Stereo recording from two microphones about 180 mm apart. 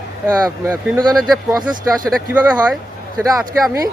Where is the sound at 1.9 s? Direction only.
Centre (ahead or behind).